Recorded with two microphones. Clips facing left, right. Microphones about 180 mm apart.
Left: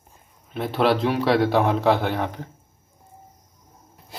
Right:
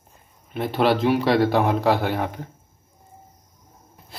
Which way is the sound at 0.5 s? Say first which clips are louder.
Even; centre (ahead or behind).